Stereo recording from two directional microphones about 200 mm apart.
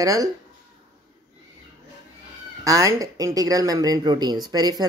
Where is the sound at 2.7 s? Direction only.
15° right (ahead or behind).